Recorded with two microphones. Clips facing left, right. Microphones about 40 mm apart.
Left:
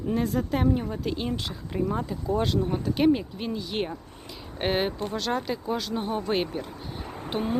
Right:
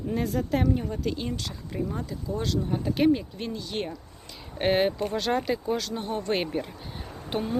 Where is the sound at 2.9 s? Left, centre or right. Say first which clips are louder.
Even; centre.